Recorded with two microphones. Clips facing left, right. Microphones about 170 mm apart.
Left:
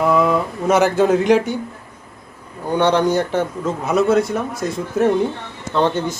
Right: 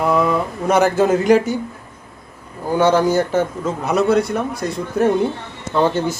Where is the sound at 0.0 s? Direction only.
Centre (ahead or behind).